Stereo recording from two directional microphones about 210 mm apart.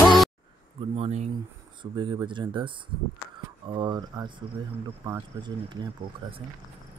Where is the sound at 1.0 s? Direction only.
30° right (ahead or behind).